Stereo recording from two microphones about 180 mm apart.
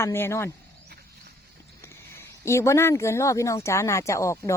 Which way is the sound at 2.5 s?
15° left (ahead or behind).